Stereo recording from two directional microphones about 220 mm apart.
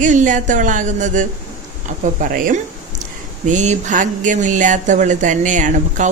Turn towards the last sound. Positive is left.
turn(degrees=-35)  # may be behind; listen again after turning